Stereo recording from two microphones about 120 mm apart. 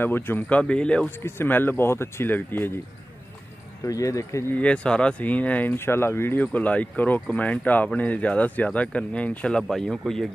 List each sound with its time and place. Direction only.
0.0 s speech: 15° left (ahead or behind)
3.8 s speech: 25° left (ahead or behind)
4.6 s speech: 10° left (ahead or behind)